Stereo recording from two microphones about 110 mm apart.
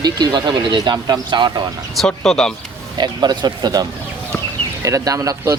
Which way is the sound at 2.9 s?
40° right (ahead or behind).